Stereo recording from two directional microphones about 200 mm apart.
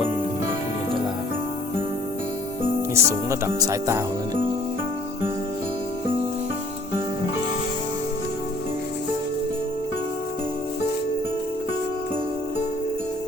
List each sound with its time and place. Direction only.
2.9 s speech: 15° right (ahead or behind)